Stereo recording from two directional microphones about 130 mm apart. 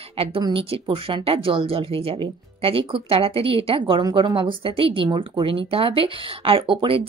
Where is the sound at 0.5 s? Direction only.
45° right (ahead or behind).